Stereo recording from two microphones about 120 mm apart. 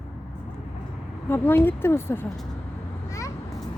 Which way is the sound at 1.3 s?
20° left (ahead or behind).